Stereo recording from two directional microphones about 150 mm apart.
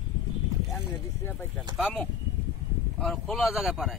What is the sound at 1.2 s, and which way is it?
Speech, 15° left (ahead or behind).